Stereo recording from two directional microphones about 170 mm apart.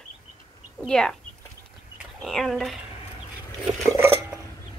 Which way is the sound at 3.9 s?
15° right (ahead or behind).